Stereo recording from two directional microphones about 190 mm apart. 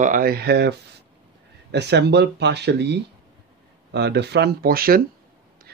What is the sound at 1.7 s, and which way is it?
Speech, 65° right (ahead or behind).